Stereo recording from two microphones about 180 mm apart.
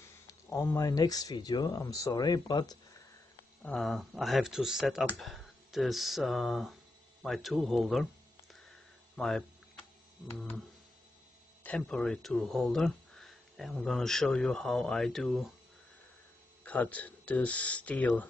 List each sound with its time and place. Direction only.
0.5 s speech: 15° left (ahead or behind)
3.6 s speech: 5° left (ahead or behind)
9.1 s speech: centre (ahead or behind)
11.6 s speech: 5° left (ahead or behind)
16.6 s speech: 10° left (ahead or behind)